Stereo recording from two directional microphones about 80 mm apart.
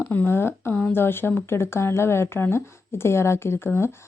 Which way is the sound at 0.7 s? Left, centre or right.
Centre.